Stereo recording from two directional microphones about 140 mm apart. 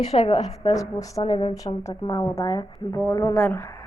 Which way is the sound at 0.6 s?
25° left (ahead or behind).